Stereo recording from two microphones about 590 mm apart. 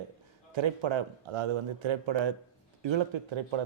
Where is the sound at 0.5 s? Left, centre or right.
Right.